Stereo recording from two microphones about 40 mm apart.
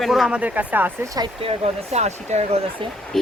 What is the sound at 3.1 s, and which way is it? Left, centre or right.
Speech, centre.